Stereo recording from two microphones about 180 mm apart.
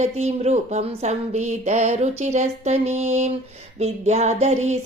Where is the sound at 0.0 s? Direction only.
40° right (ahead or behind).